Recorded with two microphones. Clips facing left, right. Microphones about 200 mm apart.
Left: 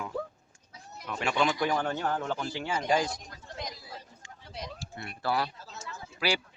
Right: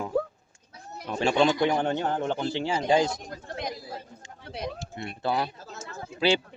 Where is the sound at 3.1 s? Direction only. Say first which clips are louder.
Right 6 dB; 55° right (ahead or behind).